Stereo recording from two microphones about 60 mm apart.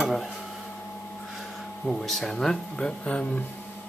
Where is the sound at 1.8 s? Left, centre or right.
Centre.